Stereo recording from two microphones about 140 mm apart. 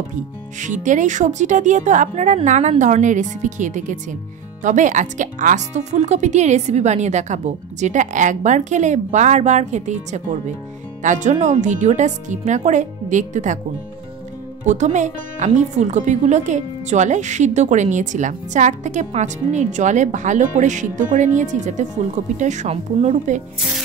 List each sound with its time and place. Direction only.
0.1 s a woman's voice: 65° right (ahead or behind)
14.6 s a woman's voice: 60° right (ahead or behind)